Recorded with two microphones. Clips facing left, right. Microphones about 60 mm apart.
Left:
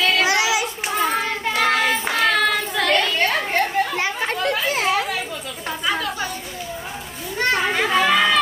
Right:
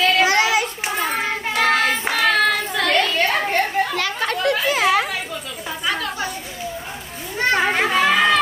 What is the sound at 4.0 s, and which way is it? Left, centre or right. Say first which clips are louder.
Chatter: right 1 dB; right.